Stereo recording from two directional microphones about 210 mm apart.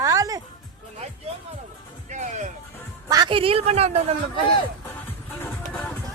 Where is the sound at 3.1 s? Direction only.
20° right (ahead or behind).